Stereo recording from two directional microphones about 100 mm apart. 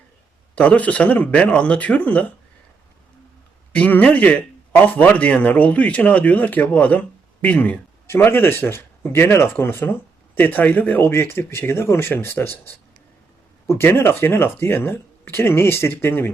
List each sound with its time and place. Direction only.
0.5 s speech: 15° left (ahead or behind)
3.8 s speech: 15° left (ahead or behind)